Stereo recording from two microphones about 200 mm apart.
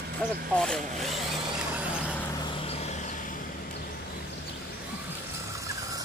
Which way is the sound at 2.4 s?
30° left (ahead or behind).